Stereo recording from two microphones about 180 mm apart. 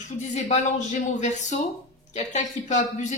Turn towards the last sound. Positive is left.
turn(degrees=40)  # may be behind; listen again after turning